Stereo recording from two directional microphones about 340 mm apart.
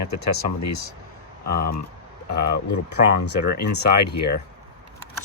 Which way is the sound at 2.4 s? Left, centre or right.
Left.